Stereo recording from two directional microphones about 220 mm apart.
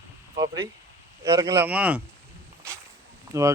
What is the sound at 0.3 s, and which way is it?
Speech, 15° right (ahead or behind).